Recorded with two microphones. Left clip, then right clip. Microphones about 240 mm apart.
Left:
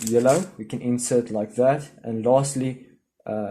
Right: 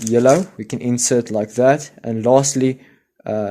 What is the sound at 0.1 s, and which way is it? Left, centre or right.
Speech, right.